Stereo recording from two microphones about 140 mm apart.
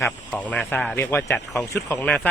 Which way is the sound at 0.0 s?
10° left (ahead or behind).